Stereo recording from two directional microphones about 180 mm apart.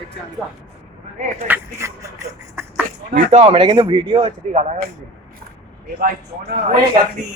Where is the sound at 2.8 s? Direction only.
45° right (ahead or behind).